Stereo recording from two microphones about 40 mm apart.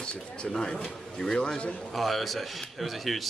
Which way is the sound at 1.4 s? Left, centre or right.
Left.